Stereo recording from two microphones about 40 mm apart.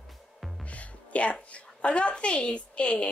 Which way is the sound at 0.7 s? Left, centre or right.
Left.